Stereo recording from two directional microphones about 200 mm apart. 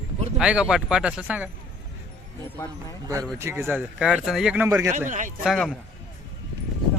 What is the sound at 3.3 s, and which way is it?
Speech, 10° right (ahead or behind).